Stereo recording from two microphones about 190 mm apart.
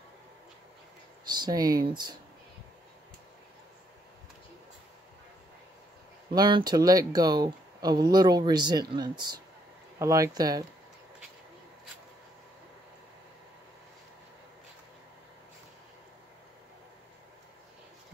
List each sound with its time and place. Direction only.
1.3 s speech: 20° right (ahead or behind)
6.3 s speech: 25° right (ahead or behind)